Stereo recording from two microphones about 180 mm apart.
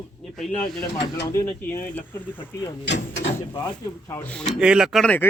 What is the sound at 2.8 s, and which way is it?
Speech, 75° left (ahead or behind).